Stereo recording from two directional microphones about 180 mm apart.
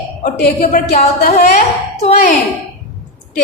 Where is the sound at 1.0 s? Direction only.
40° left (ahead or behind).